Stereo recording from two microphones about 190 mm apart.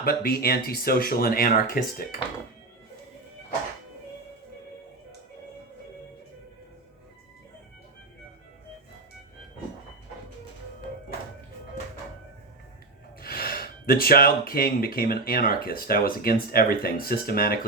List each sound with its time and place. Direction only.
0.0 s speech: 50° left (ahead or behind)
13.2 s speech: 55° left (ahead or behind)